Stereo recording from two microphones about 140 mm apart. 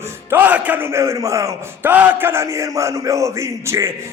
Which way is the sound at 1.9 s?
15° right (ahead or behind).